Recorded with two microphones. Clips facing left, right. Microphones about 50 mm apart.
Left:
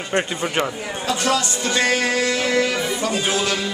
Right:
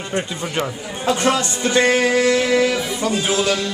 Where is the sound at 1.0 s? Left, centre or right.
Right.